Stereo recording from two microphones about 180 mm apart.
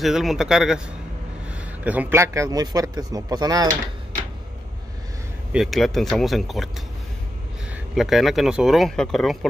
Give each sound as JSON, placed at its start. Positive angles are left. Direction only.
{"t": 0.0, "sound": "a man's voice", "side_deg": 0}
{"t": 5.5, "sound": "speech", "side_deg": 0}
{"t": 7.9, "sound": "speech", "side_deg": 0}